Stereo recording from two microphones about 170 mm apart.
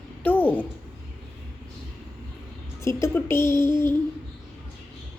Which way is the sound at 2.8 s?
15° left (ahead or behind).